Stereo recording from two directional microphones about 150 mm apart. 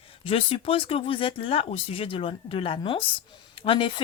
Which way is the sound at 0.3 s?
40° left (ahead or behind).